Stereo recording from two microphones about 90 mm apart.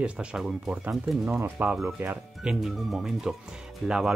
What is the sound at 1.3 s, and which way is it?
Speech, 20° right (ahead or behind).